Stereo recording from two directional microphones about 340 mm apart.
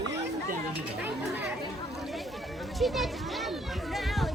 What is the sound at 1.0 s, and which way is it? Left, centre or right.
Chatter, centre.